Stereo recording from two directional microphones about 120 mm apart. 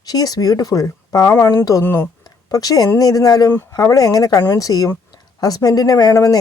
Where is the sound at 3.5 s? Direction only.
20° left (ahead or behind).